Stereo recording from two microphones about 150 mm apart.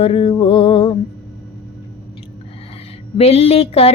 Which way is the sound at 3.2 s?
45° left (ahead or behind).